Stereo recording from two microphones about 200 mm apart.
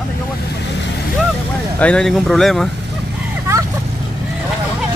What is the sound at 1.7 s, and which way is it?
Speech, 5° left (ahead or behind).